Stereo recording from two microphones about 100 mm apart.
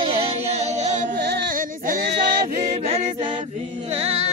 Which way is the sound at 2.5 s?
90° right.